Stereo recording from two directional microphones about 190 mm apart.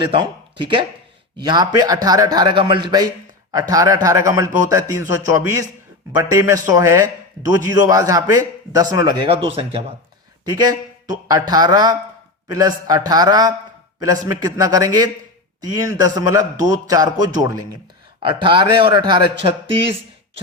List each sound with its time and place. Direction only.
0.0 s a man's voice: 25° right (ahead or behind)